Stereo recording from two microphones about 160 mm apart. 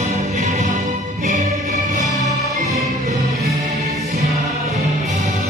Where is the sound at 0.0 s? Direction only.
50° right (ahead or behind).